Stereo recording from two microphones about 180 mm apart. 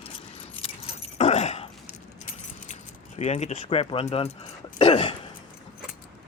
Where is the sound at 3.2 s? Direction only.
40° left (ahead or behind).